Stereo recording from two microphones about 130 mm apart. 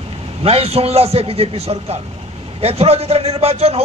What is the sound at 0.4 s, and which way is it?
A man's voice, 50° right (ahead or behind).